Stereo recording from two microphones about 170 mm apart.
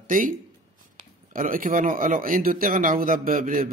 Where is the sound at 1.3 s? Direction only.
55° right (ahead or behind).